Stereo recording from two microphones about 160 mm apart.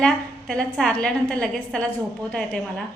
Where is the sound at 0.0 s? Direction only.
5° left (ahead or behind).